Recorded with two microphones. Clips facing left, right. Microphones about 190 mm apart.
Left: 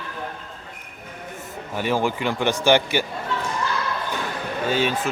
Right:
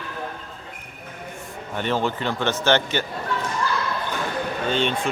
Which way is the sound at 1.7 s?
10° left (ahead or behind).